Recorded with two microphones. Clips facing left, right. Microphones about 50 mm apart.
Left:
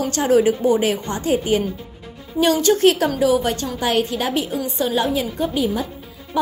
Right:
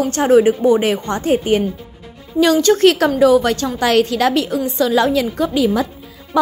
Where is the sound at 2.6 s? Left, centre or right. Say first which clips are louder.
Right 3 dB; right.